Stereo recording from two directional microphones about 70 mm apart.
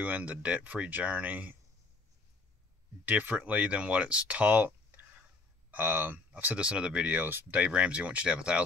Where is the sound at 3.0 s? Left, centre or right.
Right.